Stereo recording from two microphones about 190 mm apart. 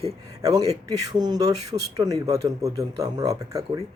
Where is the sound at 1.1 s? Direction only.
20° right (ahead or behind).